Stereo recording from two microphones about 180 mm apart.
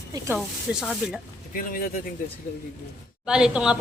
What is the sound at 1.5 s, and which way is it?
Speech, 55° left (ahead or behind).